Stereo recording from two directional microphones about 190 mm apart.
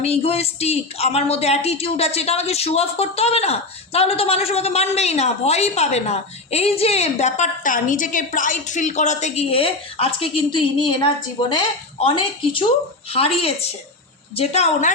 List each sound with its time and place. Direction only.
0.0 s a woman's voice: 30° left (ahead or behind)